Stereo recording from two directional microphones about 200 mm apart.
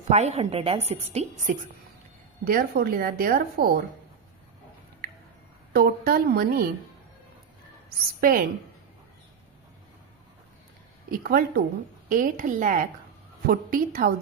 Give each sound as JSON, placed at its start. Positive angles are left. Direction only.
{"t": 0.1, "sound": "a woman's voice", "side_deg": -35}
{"t": 2.4, "sound": "a woman's voice", "side_deg": -50}
{"t": 5.7, "sound": "a woman's voice", "side_deg": -50}
{"t": 8.2, "sound": "a woman's voice", "side_deg": -45}
{"t": 11.1, "sound": "a woman's voice", "side_deg": -45}